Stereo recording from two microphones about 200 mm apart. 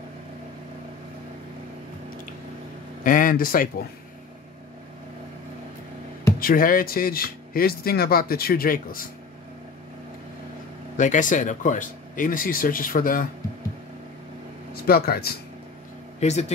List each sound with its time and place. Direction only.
3.0 s speech: 45° left (ahead or behind)
6.4 s speech: 45° left (ahead or behind)
11.0 s speech: 40° left (ahead or behind)
14.7 s speech: 50° left (ahead or behind)
16.2 s speech: 35° left (ahead or behind)